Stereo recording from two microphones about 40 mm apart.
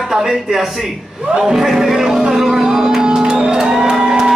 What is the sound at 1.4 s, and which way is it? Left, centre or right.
Music, centre.